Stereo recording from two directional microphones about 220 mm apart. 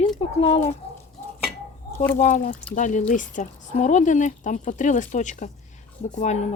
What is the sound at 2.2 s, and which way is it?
Speech, 35° left (ahead or behind).